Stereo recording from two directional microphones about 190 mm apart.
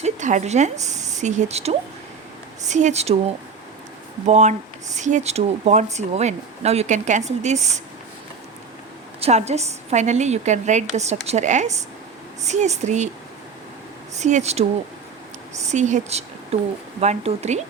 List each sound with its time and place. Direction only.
0.0 s speech: 40° right (ahead or behind)
4.3 s speech: 40° right (ahead or behind)
9.2 s speech: 35° right (ahead or behind)
14.2 s speech: 40° right (ahead or behind)
15.7 s speech: 40° right (ahead or behind)